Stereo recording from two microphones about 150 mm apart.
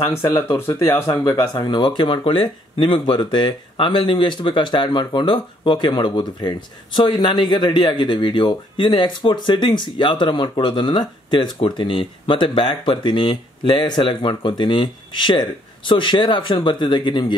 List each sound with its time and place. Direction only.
0.0 s speech: 25° left (ahead or behind)